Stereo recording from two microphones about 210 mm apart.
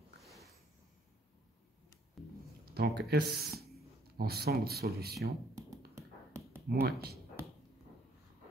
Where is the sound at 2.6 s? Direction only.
50° right (ahead or behind).